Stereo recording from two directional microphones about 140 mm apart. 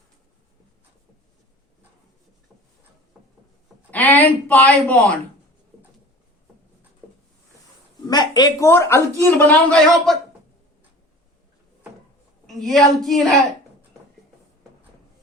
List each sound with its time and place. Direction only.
3.9 s speech: 10° left (ahead or behind)
8.0 s speech: 30° left (ahead or behind); by 10.2 s 5° left (ahead or behind)
12.5 s a woman's voice: centre (ahead or behind)